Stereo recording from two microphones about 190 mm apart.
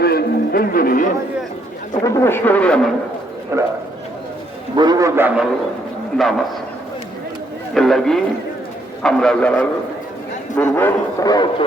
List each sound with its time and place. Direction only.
0.0 s a sound: 55° left (ahead or behind)
1.9 s speech: 15° left (ahead or behind)
3.5 s a man's voice: 15° right (ahead or behind)
4.8 s a man's voice: 20° right (ahead or behind); by 6.4 s centre (ahead or behind)
7.7 s a man's voice: centre (ahead or behind); by 11.4 s 20° left (ahead or behind)